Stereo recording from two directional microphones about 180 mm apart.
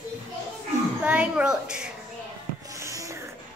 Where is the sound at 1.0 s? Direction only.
5° right (ahead or behind).